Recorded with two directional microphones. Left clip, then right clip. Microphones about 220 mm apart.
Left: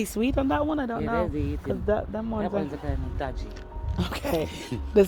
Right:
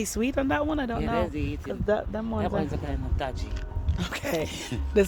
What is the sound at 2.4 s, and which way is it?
Speech, 45° right (ahead or behind).